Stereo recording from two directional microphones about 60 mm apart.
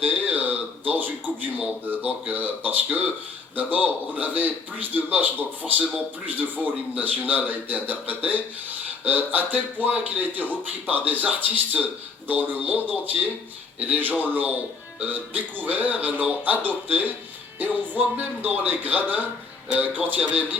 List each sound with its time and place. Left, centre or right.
0.0 s a man's voice: right